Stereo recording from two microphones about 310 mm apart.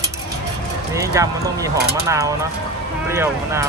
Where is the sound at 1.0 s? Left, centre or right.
Centre.